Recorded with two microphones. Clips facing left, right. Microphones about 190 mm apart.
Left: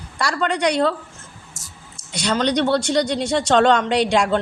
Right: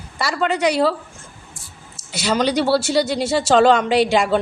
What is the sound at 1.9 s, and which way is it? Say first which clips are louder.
A woman's voice: right 2 dB; 5° right (ahead or behind).